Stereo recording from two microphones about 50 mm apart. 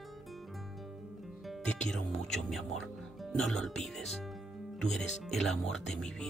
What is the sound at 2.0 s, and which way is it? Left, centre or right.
Speech, centre.